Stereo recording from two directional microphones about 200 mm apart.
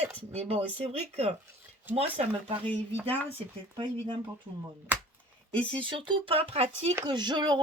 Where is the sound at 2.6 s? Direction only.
10° left (ahead or behind).